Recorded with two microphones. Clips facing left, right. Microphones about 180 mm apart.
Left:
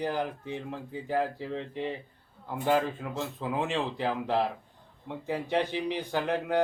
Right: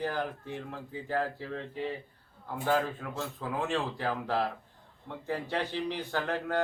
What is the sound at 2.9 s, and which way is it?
Speech, 20° left (ahead or behind).